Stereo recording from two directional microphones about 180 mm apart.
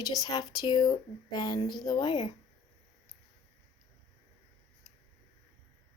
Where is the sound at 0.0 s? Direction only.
20° left (ahead or behind).